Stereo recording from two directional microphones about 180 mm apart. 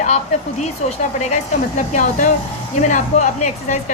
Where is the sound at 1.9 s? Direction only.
40° left (ahead or behind).